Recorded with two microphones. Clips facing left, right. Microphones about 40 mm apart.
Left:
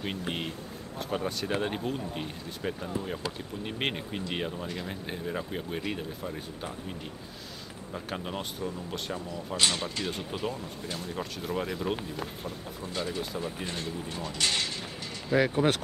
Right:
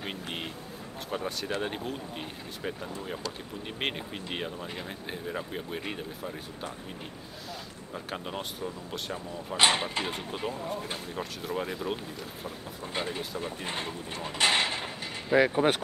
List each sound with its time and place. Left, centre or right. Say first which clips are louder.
0.0 s speech: left 3 dB; centre
7.9 s speech: left 1 dB; centre
9.6 s speech: right 4 dB; right
11.0 s speech: left 1 dB; centre
11.9 s speech: left 2 dB; centre
12.8 s speech: even; right
15.3 s speech: right 2 dB; centre